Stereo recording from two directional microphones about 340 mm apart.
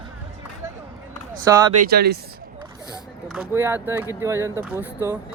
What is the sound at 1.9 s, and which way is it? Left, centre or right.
Speech, right.